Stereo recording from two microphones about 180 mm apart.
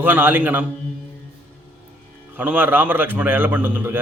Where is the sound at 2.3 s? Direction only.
10° right (ahead or behind).